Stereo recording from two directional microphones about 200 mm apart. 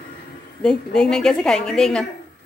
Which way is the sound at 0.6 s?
5° left (ahead or behind).